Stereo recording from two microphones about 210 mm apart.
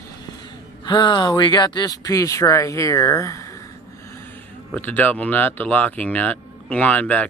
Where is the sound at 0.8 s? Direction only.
20° left (ahead or behind).